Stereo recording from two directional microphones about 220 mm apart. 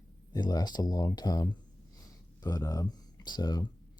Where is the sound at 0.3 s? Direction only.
20° left (ahead or behind).